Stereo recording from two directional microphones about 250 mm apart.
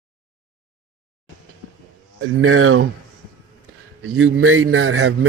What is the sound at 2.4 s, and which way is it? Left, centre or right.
Speech, right.